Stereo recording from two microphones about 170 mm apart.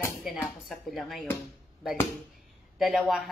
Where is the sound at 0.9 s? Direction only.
Centre (ahead or behind).